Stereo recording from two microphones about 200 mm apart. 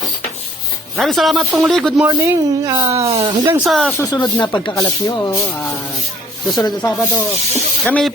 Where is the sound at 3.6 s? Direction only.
Centre (ahead or behind).